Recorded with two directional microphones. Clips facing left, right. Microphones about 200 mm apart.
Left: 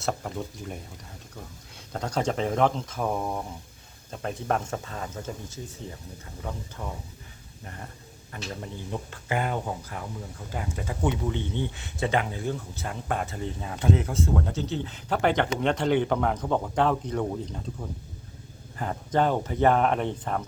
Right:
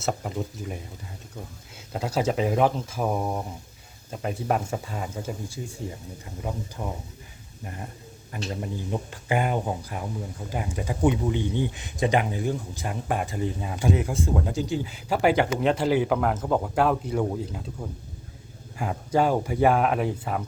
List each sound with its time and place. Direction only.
0.0 s speech: 5° right (ahead or behind)
1.9 s speech: 5° right (ahead or behind)